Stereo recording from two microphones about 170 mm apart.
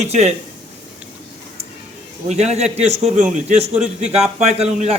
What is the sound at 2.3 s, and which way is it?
A man's voice, 40° right (ahead or behind).